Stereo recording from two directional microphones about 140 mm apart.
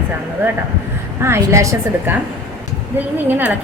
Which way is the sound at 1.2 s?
20° right (ahead or behind).